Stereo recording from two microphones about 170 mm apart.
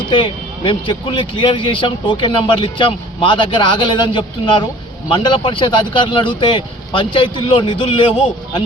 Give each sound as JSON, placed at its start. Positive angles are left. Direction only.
{"t": 0.1, "sound": "speech", "side_deg": 30}